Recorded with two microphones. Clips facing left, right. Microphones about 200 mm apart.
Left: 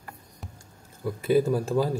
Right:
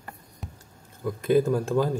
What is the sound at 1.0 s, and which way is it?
Speech, 5° left (ahead or behind).